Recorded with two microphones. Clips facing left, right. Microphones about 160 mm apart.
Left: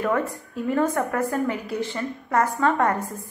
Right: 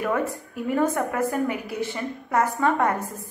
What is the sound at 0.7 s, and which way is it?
A woman's voice, 15° right (ahead or behind).